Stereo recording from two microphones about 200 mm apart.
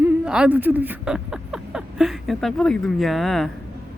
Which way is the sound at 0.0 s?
5° right (ahead or behind).